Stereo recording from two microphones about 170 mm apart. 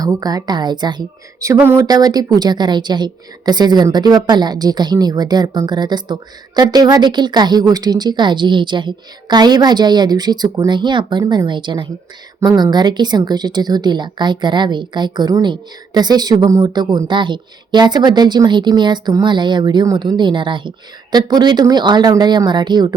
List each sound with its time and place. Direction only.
0.0 s speech: 20° right (ahead or behind)